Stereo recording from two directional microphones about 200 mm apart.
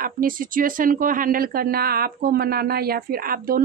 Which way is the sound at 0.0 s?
45° right (ahead or behind).